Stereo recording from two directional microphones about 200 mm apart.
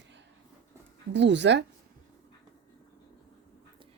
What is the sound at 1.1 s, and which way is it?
Speech, 60° right (ahead or behind).